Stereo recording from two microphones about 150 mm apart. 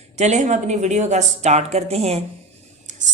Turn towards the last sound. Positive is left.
turn(degrees=-55)  # may be behind; listen again after turning